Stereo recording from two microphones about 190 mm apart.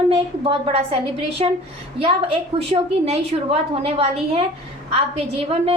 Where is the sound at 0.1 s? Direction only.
30° right (ahead or behind).